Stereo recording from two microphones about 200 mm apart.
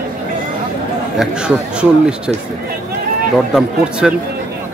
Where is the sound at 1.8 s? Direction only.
5° right (ahead or behind).